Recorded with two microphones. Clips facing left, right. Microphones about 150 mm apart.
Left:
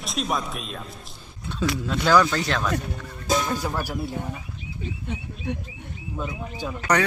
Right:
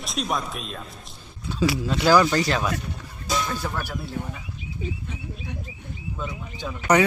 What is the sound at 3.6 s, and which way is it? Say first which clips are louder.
Speech: left 2 dB; 10° left (ahead or behind).